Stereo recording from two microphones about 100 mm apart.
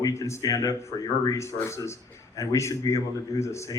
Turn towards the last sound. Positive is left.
turn(degrees=30)  # may be behind; listen again after turning